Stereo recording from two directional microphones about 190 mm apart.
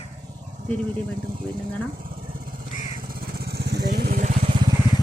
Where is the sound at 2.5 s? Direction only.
50° right (ahead or behind).